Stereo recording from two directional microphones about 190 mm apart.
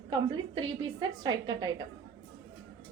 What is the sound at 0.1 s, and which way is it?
A woman's voice, 25° right (ahead or behind).